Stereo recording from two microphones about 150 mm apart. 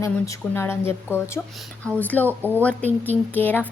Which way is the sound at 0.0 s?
20° left (ahead or behind).